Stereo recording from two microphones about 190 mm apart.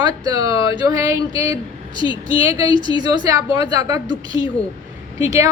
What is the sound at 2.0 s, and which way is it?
Speech, 25° left (ahead or behind).